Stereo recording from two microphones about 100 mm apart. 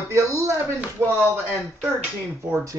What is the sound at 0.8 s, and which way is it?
Speech, 20° right (ahead or behind).